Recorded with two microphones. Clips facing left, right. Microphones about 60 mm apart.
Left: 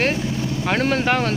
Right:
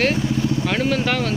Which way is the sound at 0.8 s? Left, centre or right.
Left.